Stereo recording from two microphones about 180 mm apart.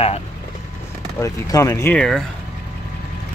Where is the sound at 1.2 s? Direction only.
15° left (ahead or behind).